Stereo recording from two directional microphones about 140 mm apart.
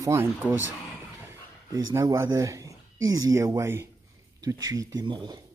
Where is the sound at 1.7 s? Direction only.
20° right (ahead or behind).